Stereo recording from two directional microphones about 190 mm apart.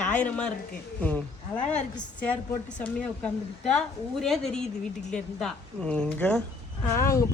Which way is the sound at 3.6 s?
Centre (ahead or behind).